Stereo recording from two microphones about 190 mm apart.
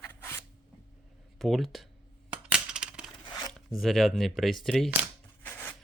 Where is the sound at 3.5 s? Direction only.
Centre (ahead or behind).